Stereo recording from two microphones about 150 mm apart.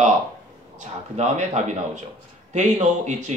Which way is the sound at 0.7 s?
50° right (ahead or behind).